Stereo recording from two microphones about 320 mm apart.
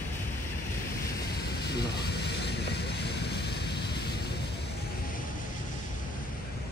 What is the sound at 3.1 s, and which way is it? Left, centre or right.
Vehicle, left.